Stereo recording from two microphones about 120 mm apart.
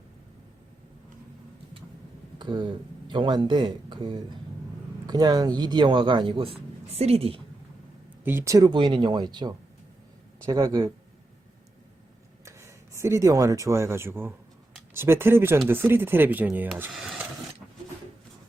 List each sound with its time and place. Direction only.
2.4 s speech: 40° right (ahead or behind)
8.2 s speech: 20° right (ahead or behind)
8.7 s speech: 40° right (ahead or behind)
12.5 s speech: 25° right (ahead or behind)
16.9 s speech: centre (ahead or behind)